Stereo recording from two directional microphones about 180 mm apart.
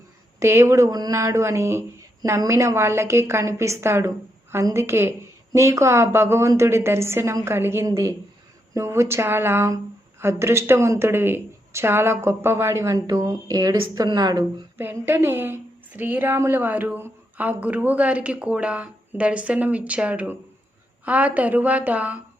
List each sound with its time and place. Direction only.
0.3 s a woman's voice: 15° right (ahead or behind)